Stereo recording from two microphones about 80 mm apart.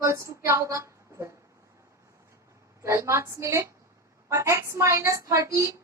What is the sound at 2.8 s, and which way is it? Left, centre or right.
Female singing, right.